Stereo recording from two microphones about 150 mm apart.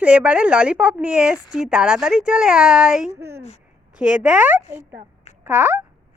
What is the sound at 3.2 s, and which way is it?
A woman's voice, 15° right (ahead or behind).